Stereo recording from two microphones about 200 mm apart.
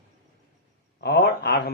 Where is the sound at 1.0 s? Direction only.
55° left (ahead or behind).